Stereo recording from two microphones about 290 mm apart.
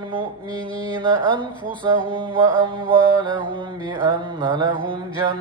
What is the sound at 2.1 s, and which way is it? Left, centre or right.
Mantra, centre.